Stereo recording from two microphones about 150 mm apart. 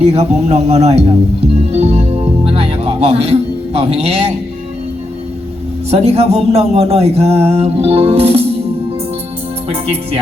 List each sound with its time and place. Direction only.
0.0 s speech: 45° right (ahead or behind)
1.5 s music: 45° right (ahead or behind)
5.9 s speech: 45° right (ahead or behind)
9.6 s speech: 40° right (ahead or behind)